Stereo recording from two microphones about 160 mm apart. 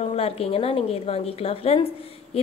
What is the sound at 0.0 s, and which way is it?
A woman's voice, 40° left (ahead or behind).